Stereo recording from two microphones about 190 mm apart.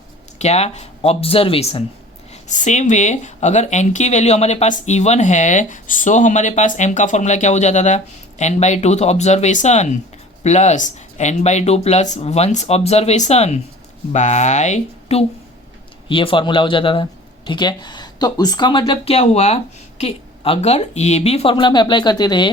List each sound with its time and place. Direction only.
0.3 s speech: 35° left (ahead or behind)
2.3 s speech: 40° left (ahead or behind)
16.0 s speech: 25° left (ahead or behind)